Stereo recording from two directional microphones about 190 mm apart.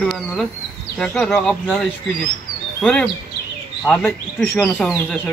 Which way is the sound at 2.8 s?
5° left (ahead or behind).